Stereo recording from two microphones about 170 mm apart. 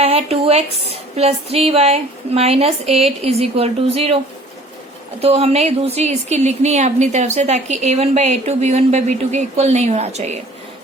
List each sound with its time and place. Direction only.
0.0 s a sound: 35° right (ahead or behind)
1.1 s a woman's voice: 35° right (ahead or behind)
5.2 s a woman's voice: 40° right (ahead or behind)